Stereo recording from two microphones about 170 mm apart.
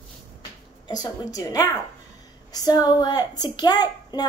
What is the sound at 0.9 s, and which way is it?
Speech, 20° left (ahead or behind).